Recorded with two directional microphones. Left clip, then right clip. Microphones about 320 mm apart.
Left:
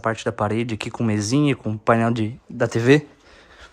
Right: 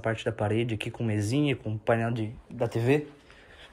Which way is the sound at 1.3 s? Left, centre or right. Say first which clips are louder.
Left 7 dB; left.